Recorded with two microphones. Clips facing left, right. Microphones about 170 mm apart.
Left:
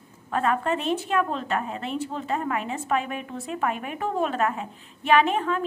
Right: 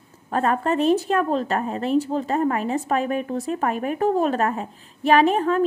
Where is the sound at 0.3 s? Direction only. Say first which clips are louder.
Right 3 dB; 40° right (ahead or behind).